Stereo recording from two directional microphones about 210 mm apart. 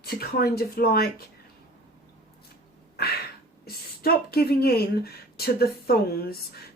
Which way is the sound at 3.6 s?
45° left (ahead or behind).